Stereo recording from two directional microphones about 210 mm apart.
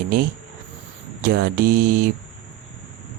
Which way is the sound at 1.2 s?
45° right (ahead or behind).